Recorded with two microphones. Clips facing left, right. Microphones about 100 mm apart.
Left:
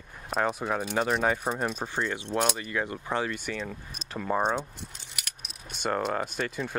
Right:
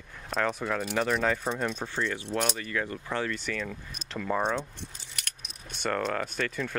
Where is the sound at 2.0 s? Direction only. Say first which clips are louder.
Left 2 dB; 25° left (ahead or behind).